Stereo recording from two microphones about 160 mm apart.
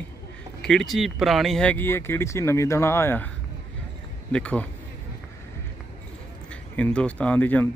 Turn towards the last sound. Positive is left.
turn(degrees=10)  # may be behind; listen again after turning